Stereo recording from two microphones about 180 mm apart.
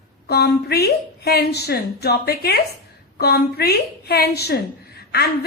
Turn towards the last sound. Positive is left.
turn(degrees=60)  # may be behind; listen again after turning